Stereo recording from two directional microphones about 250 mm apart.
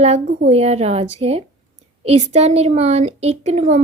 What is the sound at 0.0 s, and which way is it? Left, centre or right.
A woman's voice, right.